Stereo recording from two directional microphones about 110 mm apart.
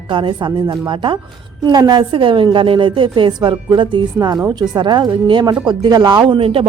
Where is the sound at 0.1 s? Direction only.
45° right (ahead or behind).